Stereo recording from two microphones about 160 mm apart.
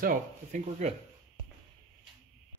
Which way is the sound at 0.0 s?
55° right (ahead or behind).